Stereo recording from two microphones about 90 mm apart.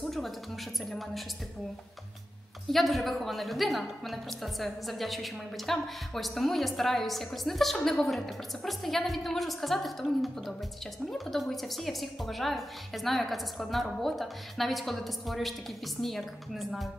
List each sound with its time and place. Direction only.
0.8 s a woman's voice: centre (ahead or behind)
2.7 s a woman's voice: centre (ahead or behind)